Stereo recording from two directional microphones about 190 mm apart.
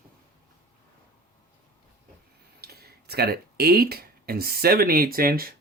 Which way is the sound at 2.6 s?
55° right (ahead or behind).